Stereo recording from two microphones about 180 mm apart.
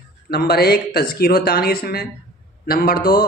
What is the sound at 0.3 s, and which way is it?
Speech, 60° left (ahead or behind).